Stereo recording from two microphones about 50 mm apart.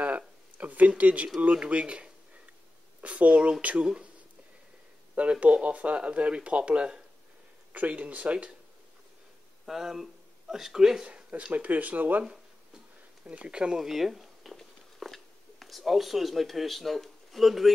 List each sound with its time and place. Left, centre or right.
0.0 s a sound: right
1.5 s speech: right
5.1 s speech: right
9.7 s speech: centre
11.1 s speech: right
13.2 s speech: right; by 17.7 s centre